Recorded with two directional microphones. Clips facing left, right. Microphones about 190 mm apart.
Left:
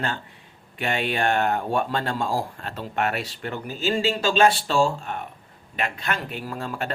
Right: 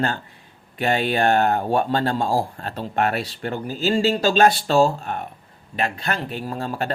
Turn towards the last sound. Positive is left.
turn(degrees=-35)  # may be behind; listen again after turning